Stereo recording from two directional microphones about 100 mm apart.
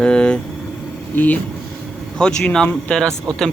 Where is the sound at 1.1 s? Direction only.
15° left (ahead or behind).